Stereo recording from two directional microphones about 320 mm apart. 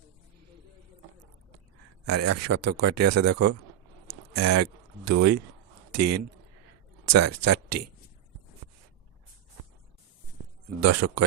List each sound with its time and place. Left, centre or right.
2.0 s speech: right
10.8 s speech: right